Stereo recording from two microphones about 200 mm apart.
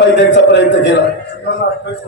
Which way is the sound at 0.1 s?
65° left (ahead or behind).